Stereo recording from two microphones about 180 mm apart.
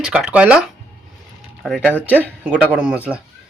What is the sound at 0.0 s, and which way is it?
Speech, 5° right (ahead or behind).